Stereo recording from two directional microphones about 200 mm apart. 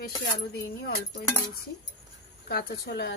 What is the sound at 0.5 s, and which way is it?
Speech, 50° left (ahead or behind).